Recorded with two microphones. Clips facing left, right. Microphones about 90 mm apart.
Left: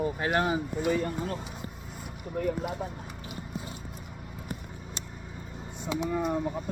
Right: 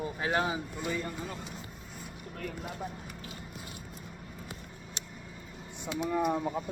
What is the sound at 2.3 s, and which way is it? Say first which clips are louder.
Speech: left 14 dB; 10° left (ahead or behind).